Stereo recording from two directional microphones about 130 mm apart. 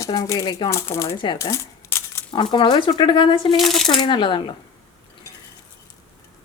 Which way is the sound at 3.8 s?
35° left (ahead or behind).